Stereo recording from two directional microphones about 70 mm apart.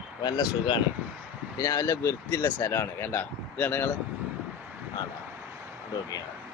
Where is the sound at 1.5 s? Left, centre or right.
Left.